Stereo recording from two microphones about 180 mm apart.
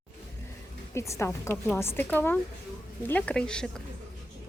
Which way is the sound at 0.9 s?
15° left (ahead or behind).